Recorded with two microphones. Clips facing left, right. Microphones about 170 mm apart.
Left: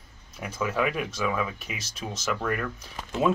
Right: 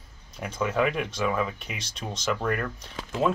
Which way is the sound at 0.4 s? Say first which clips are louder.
Right 2 dB; 5° left (ahead or behind).